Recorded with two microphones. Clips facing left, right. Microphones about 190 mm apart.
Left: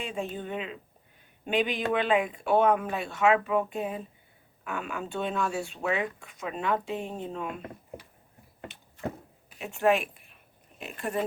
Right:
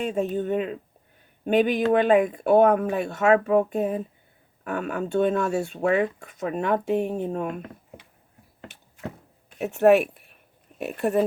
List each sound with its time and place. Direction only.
0.0 s speech: 45° right (ahead or behind)
9.6 s speech: 60° right (ahead or behind)